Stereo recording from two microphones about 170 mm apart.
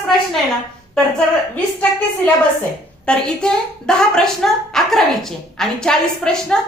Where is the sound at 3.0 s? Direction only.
5° left (ahead or behind).